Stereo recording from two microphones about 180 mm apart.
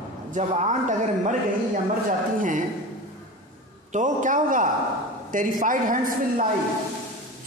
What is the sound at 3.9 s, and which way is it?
A man's voice, 45° right (ahead or behind).